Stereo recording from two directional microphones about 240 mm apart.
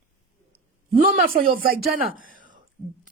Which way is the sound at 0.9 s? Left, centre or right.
Right.